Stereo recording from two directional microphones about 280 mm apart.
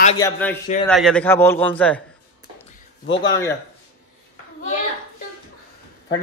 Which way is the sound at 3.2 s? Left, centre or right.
Centre.